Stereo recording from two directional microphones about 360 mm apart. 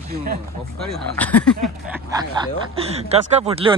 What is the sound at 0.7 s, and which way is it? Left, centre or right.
Speech, centre.